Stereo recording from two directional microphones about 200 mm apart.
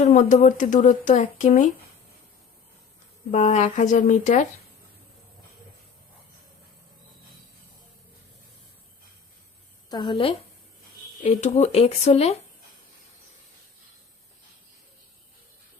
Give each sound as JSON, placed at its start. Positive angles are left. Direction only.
{"t": 0.0, "sound": "speech", "side_deg": 40}
{"t": 3.3, "sound": "speech", "side_deg": 35}
{"t": 9.9, "sound": "a woman's voice", "side_deg": 25}
{"t": 11.2, "sound": "speech", "side_deg": 35}